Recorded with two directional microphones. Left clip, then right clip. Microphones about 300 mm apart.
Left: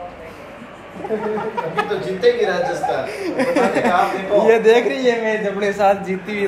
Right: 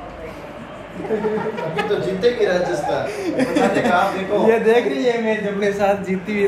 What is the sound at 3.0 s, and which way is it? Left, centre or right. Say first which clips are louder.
Speech: left 1 dB; centre.